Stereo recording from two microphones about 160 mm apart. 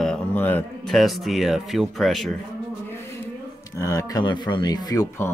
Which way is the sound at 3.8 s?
20° left (ahead or behind).